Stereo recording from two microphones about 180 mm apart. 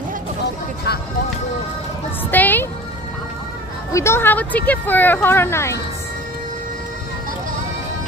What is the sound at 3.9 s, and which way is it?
Speech, 15° left (ahead or behind).